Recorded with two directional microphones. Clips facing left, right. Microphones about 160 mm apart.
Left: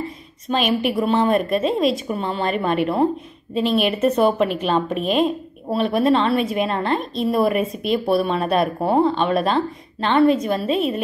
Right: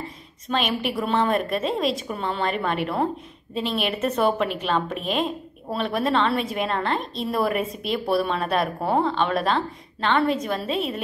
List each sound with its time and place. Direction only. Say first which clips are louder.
0.5 s a woman's voice: left 5 dB; 10° left (ahead or behind)